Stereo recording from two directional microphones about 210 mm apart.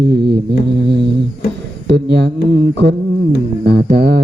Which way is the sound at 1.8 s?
50° right (ahead or behind).